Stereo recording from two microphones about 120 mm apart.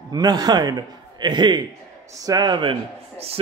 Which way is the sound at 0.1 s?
35° right (ahead or behind).